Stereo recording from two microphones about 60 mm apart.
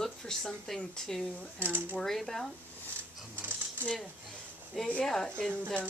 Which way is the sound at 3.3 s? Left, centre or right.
Right.